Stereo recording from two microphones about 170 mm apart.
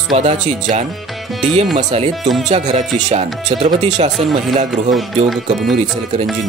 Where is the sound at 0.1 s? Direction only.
45° right (ahead or behind).